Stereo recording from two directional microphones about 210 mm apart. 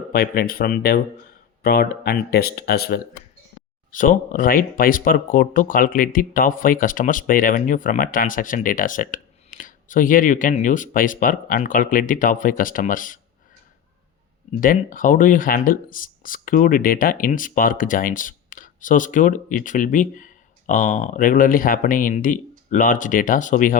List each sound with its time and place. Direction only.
0.1 s speech: 45° left (ahead or behind)
3.9 s speech: 40° left (ahead or behind)
14.6 s speech: 40° left (ahead or behind)